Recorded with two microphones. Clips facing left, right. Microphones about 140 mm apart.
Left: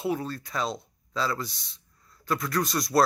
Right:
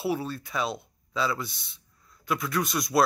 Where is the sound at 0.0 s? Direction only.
10° right (ahead or behind).